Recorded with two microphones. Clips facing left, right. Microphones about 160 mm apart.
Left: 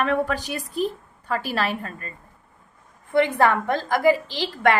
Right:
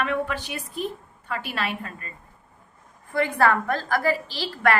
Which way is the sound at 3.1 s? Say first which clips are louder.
Left 3 dB; 20° left (ahead or behind).